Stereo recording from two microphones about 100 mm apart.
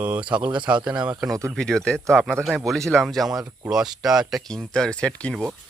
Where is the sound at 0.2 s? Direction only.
55° right (ahead or behind).